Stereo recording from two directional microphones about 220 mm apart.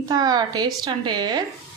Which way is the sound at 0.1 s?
20° right (ahead or behind).